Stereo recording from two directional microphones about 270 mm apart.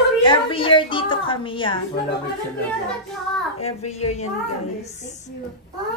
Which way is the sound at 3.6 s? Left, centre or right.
Left.